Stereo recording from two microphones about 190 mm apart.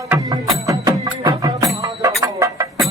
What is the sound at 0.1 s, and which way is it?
Music, 15° right (ahead or behind).